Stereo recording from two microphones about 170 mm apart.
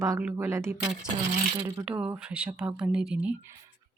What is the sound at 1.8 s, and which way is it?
Speech, 10° right (ahead or behind).